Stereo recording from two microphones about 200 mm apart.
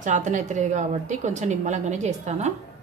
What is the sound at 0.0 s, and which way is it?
A woman's voice, 40° right (ahead or behind).